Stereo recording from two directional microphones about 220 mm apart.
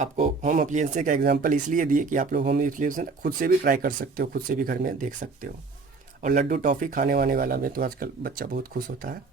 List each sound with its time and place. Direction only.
0.0 s speech: 35° right (ahead or behind)